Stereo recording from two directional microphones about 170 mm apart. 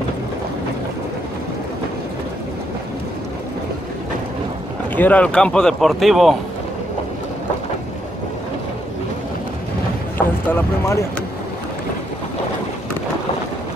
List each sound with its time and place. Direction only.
4.9 s speech: 10° left (ahead or behind)
10.1 s speech: 15° left (ahead or behind)